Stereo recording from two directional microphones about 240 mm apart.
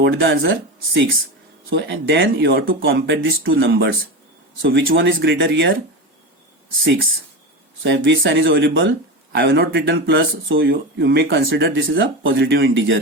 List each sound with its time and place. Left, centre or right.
0.0 s speech: right
1.7 s speech: right
6.8 s speech: right